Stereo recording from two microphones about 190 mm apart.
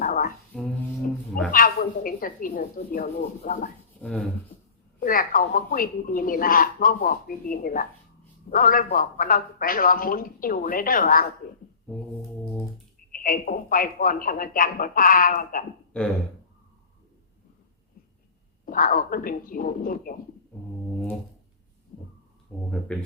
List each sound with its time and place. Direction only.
0.0 s music: 45° left (ahead or behind)
0.5 s a sound: 5° left (ahead or behind)
1.5 s a woman's voice: 50° left (ahead or behind)
4.9 s a woman's voice: 45° left (ahead or behind)
13.1 s a woman's voice: 50° left (ahead or behind)
18.6 s a woman's voice: 45° left (ahead or behind)
22.7 s speech: 5° left (ahead or behind)